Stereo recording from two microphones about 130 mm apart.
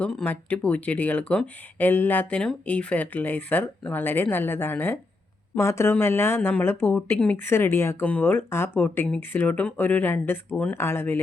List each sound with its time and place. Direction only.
0.0 s speech: 5° left (ahead or behind)